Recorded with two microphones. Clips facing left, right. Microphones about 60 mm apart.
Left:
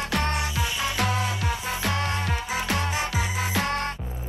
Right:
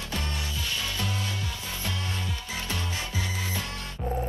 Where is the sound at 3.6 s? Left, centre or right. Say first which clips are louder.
Left 11 dB; left.